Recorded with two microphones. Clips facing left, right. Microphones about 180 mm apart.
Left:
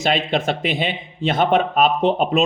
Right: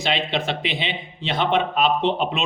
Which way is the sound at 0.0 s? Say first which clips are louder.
Left 4 dB; 45° left (ahead or behind).